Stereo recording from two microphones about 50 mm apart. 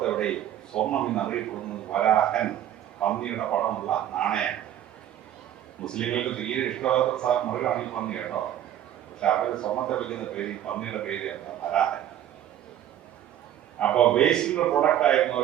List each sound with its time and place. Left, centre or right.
0.0 s a man's voice: centre
5.8 s a man's voice: centre
13.7 s a man's voice: left